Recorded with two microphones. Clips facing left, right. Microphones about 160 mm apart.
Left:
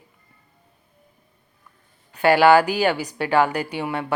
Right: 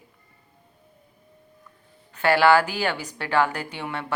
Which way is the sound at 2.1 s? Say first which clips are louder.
Left 4 dB; 15° left (ahead or behind).